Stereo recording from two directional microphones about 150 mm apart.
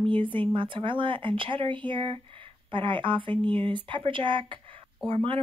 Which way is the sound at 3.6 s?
35° right (ahead or behind).